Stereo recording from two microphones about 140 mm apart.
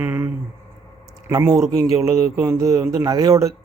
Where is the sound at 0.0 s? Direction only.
15° right (ahead or behind).